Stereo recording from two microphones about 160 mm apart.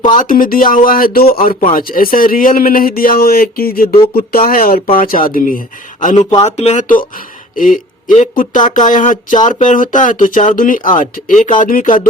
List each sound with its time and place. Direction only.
0.1 s speech: 60° left (ahead or behind); by 6.8 s 40° left (ahead or behind)
7.5 s speech: 55° left (ahead or behind)